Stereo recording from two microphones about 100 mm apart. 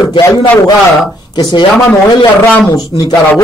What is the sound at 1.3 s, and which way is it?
Speech, 50° left (ahead or behind).